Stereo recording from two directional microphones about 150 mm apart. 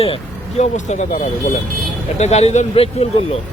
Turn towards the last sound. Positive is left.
turn(degrees=40)  # may be behind; listen again after turning